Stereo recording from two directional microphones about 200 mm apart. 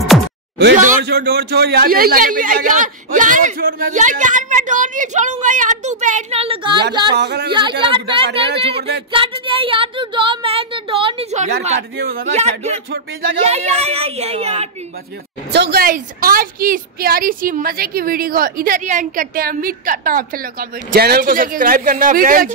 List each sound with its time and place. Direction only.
0.7 s a man's voice: 45° right (ahead or behind); by 7.2 s 20° right (ahead or behind)
7.2 s speech: 55° right (ahead or behind)
7.8 s speech: 25° right (ahead or behind)
12.0 s a woman's voice: 50° right (ahead or behind)
12.3 s a man's voice: 35° right (ahead or behind)
15.5 s a woman's voice: 55° right (ahead or behind)